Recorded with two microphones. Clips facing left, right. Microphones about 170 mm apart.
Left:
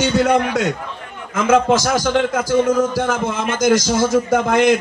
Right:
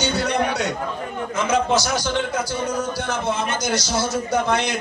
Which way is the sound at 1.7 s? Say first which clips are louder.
Left 5 dB; 90° left.